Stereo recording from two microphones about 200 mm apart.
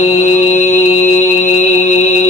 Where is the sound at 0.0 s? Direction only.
35° left (ahead or behind).